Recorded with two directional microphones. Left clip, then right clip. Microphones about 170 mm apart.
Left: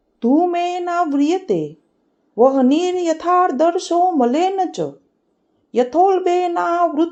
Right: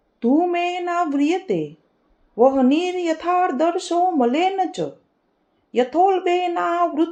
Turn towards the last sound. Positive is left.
turn(degrees=20)  # may be behind; listen again after turning